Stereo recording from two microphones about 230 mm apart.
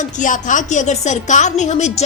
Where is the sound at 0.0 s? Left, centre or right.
Left.